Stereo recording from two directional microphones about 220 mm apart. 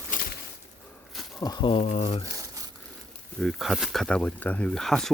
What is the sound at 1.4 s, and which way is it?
Speech, 20° left (ahead or behind).